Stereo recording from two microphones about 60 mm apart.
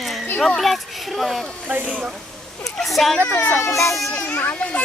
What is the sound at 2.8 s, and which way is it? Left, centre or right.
Speech, centre.